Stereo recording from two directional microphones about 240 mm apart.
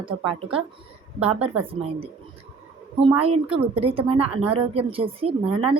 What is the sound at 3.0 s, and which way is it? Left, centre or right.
A woman's voice, right.